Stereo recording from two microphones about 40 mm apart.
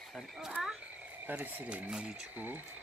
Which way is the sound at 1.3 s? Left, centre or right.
Right.